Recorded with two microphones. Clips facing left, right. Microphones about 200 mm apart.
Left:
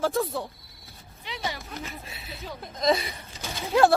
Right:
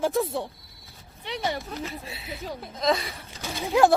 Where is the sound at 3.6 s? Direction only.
15° right (ahead or behind).